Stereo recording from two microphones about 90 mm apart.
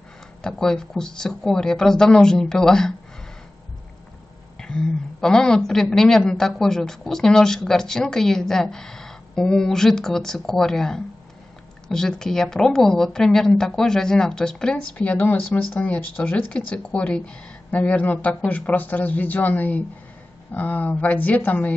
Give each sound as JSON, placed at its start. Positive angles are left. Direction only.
{"t": 0.4, "sound": "a woman's voice", "side_deg": 5}
{"t": 4.6, "sound": "a woman's voice", "side_deg": 10}